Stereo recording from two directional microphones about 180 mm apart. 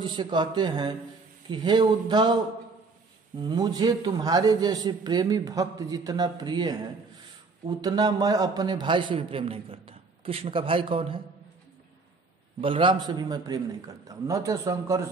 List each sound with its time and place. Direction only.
0.0 s a man's voice: 25° right (ahead or behind)
3.3 s a man's voice: 25° right (ahead or behind)
12.5 s a man's voice: 30° right (ahead or behind)